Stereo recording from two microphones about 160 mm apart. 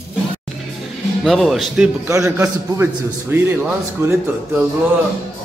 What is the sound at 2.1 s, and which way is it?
A man's voice, 15° right (ahead or behind).